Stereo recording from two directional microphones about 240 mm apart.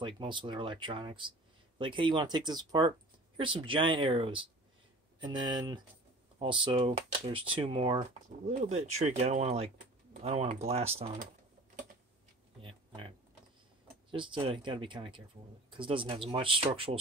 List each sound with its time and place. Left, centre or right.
0.0 s speech: right
12.6 s a sound: right
14.1 s speech: centre